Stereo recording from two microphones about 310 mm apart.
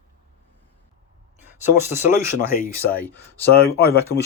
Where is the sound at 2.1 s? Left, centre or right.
Centre.